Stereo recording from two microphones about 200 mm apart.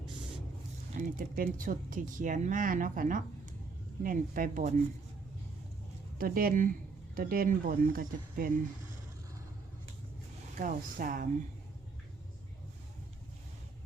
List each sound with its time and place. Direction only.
0.9 s speech: 45° right (ahead or behind)
6.1 s speech: 45° right (ahead or behind)
10.5 s speech: 45° right (ahead or behind)